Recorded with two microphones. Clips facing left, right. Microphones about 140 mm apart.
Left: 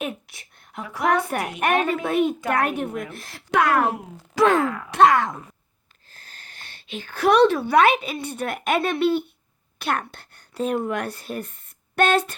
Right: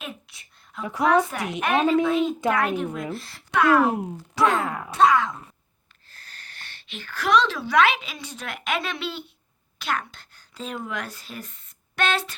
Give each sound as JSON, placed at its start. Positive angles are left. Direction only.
{"t": 0.0, "sound": "a sound", "side_deg": 65}
{"t": 1.0, "sound": "speech", "side_deg": 60}
{"t": 4.6, "sound": "grunt", "side_deg": -30}
{"t": 4.9, "sound": "a woman's voice", "side_deg": 55}